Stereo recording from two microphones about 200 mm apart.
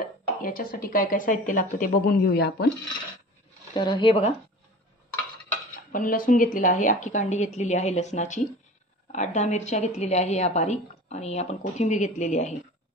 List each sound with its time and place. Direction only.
0.4 s a woman's voice: 45° left (ahead or behind)
3.7 s speech: 25° left (ahead or behind)
5.9 s a woman's voice: 45° left (ahead or behind)